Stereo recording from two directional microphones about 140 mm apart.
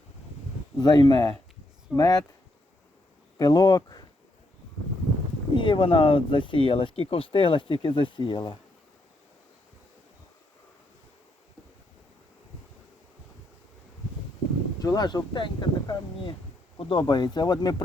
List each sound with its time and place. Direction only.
0.8 s speech: 30° left (ahead or behind)
3.3 s speech: 25° left (ahead or behind)
5.5 s speech: 35° left (ahead or behind)
14.8 s speech: 25° left (ahead or behind)